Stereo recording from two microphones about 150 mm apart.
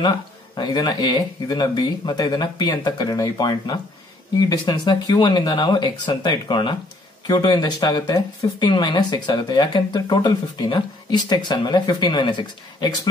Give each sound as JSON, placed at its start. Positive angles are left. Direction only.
{"t": 0.0, "sound": "speech", "side_deg": 30}